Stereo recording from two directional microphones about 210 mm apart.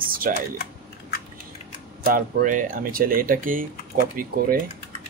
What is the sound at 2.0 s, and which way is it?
Speech, 45° right (ahead or behind).